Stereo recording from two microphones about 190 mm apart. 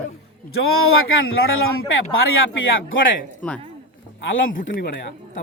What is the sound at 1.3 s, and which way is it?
Speech, 90° left.